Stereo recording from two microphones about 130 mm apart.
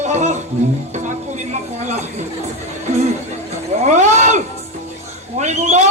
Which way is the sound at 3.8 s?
65° right (ahead or behind).